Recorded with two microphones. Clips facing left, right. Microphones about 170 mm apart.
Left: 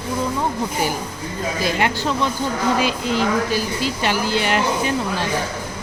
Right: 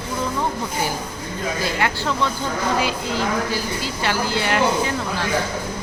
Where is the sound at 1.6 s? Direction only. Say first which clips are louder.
Left 3 dB; 20° left (ahead or behind).